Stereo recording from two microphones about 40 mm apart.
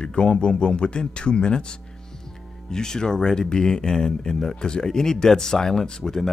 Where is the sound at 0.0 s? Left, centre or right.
Left.